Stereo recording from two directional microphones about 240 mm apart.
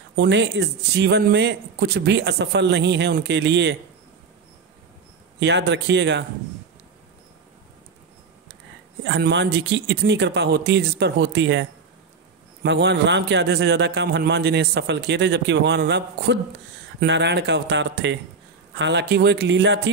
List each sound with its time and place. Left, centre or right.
0.1 s a man's voice: right
5.4 s a man's voice: right
9.0 s a man's voice: right
12.6 s a man's voice: right